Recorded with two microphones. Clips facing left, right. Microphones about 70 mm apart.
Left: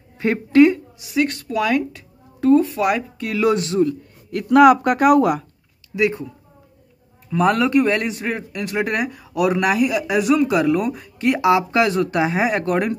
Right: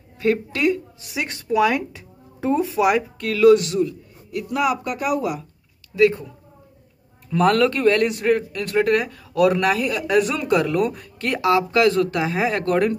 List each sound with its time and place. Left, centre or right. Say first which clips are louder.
0.2 s a woman's voice: left 7 dB; left
1.2 s speech: right 2 dB; centre
2.6 s speech: right 1 dB; centre
3.3 s a woman's voice: right 5 dB; left
3.8 s speech: left 5 dB; left
5.9 s speech: right 3 dB; centre
7.2 s speech: even; centre
8.1 s speech: right 6 dB; centre